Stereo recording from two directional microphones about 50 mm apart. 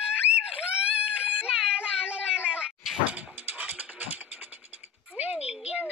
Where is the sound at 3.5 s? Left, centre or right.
Right.